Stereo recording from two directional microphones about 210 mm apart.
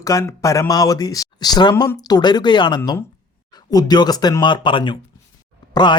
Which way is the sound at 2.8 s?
10° left (ahead or behind).